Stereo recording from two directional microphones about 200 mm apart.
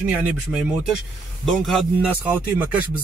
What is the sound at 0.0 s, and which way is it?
A man's voice, 5° right (ahead or behind).